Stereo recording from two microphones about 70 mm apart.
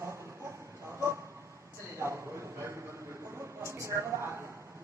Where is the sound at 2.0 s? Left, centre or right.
Right.